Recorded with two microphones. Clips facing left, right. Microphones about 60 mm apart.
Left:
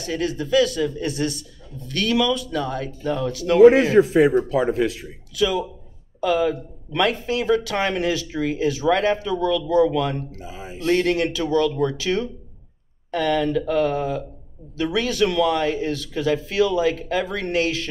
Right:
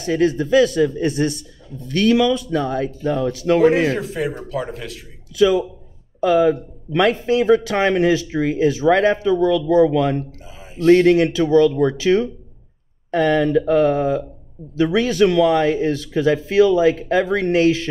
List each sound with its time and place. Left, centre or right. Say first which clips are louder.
0.0 s speech: right 7 dB; right
4.1 s speech: left 7 dB; left
5.3 s speech: right 6 dB; right